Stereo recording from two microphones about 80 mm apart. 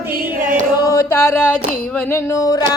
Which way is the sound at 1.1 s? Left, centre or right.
Left.